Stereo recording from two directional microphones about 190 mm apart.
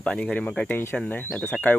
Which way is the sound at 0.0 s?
5° left (ahead or behind).